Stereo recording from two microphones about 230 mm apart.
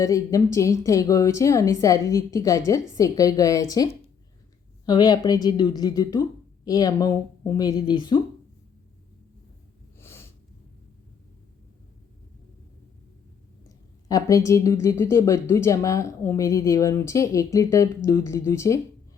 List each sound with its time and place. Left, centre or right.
0.0 s a woman's voice: centre
10.0 s snort: centre
14.1 s a woman's voice: centre